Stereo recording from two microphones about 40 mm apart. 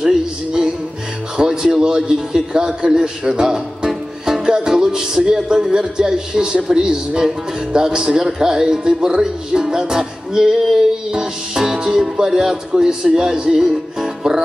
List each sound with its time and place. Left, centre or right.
0.0 s music: centre
1.3 s a man's voice: centre